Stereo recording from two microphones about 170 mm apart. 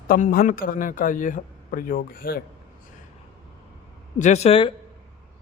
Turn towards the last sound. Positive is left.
turn(degrees=35)  # may be behind; listen again after turning